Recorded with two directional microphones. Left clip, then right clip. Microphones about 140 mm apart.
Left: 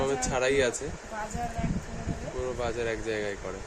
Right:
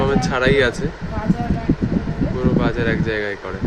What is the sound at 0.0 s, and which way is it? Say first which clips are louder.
Speech: right 9 dB; 10° left (ahead or behind).